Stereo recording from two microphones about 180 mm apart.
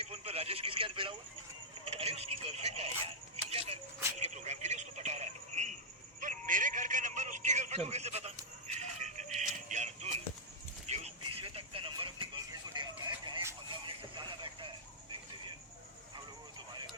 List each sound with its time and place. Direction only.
0.0 s speech: 35° right (ahead or behind)
3.3 s a sound: 35° right (ahead or behind)
4.2 s speech: 40° right (ahead or behind)
6.1 s a sound: 45° right (ahead or behind)
10.8 s music: 35° right (ahead or behind)
11.2 s vehicle: 30° right (ahead or behind)